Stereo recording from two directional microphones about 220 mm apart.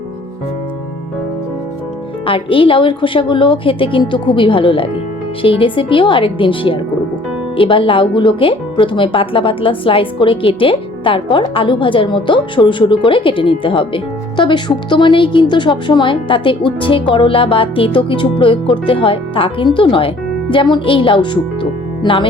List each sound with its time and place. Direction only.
2.2 s speech: 25° left (ahead or behind)